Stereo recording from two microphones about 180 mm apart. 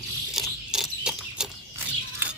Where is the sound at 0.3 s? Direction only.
5° right (ahead or behind).